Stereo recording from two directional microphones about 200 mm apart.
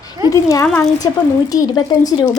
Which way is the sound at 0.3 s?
15° left (ahead or behind).